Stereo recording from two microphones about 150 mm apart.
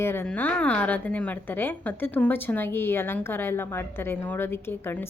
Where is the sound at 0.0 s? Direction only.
15° left (ahead or behind).